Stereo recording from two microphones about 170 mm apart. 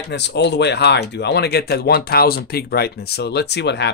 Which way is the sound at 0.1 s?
85° left.